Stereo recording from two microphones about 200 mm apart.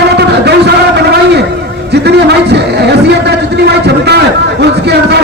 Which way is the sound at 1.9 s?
55° right (ahead or behind).